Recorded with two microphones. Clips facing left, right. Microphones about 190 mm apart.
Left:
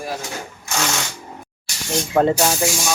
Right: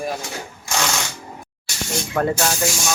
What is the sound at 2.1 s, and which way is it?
Speech, 25° left (ahead or behind).